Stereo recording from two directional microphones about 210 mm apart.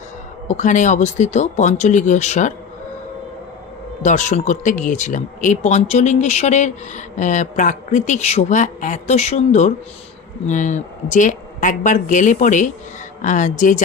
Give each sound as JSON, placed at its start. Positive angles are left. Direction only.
{"t": 0.4, "sound": "speech", "side_deg": 35}
{"t": 4.0, "sound": "speech", "side_deg": 35}